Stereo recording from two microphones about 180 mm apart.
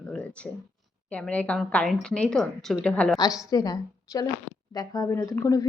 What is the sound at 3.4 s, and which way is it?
Speech, 20° left (ahead or behind).